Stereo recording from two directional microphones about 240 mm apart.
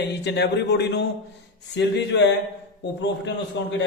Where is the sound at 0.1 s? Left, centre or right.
Left.